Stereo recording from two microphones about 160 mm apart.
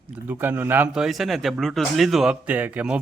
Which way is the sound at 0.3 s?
15° right (ahead or behind).